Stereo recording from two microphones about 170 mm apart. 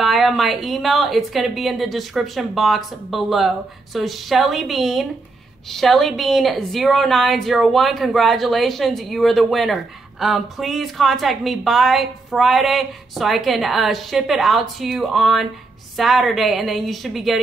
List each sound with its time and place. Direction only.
0.0 s a woman's voice: centre (ahead or behind)